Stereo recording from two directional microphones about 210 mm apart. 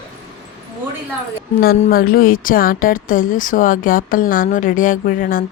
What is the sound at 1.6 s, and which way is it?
A woman's voice, 40° left (ahead or behind).